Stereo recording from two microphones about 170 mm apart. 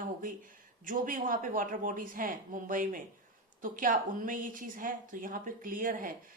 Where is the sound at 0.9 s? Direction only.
55° right (ahead or behind).